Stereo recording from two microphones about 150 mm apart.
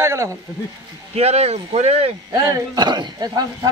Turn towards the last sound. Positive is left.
turn(degrees=-25)  # may be behind; listen again after turning